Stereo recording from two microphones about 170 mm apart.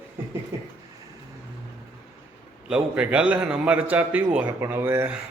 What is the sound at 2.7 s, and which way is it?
A man's voice, 5° right (ahead or behind).